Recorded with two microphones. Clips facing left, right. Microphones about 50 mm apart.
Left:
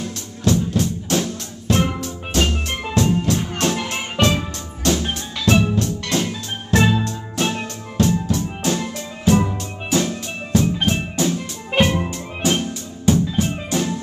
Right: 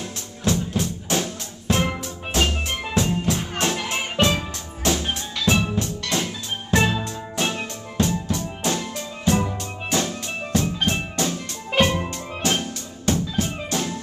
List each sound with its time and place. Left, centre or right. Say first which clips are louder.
0.0 s music: left 4 dB; centre
3.7 s music: left 2 dB; centre
5.0 s music: left 2 dB; centre